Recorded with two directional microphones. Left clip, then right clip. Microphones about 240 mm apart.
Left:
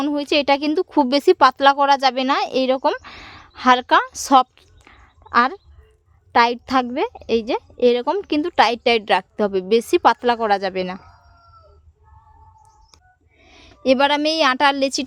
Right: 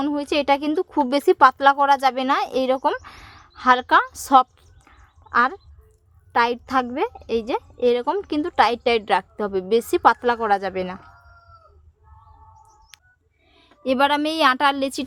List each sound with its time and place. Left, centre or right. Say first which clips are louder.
0.0 s a woman's voice: left 3 dB; left
4.9 s a sound: left 2 dB; left
6.3 s a woman's voice: left 3 dB; left
13.5 s a woman's voice: left 6 dB; left